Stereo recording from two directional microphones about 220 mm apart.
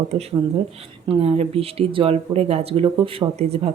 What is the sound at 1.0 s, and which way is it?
Speech, 25° right (ahead or behind).